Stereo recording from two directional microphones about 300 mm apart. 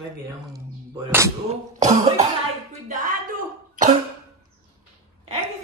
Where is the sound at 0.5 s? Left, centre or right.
Centre.